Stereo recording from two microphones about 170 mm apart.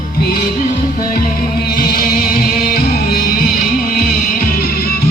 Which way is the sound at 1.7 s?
60° left (ahead or behind).